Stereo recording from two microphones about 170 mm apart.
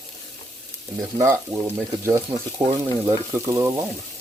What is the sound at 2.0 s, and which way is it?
Speech, 15° right (ahead or behind).